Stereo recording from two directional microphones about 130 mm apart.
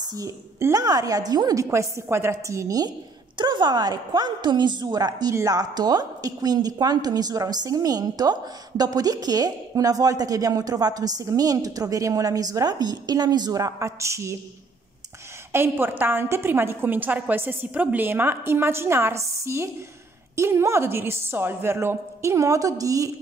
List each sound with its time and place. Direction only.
0.1 s a woman's voice: 25° right (ahead or behind)
3.3 s a woman's voice: 35° right (ahead or behind)
15.5 s a woman's voice: 15° right (ahead or behind)